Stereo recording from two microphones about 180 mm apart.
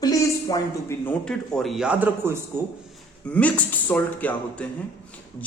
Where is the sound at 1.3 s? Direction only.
Centre (ahead or behind).